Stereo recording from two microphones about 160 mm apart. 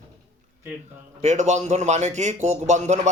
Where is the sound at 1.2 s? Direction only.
45° right (ahead or behind).